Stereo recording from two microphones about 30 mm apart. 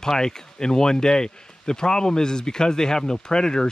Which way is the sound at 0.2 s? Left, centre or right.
Left.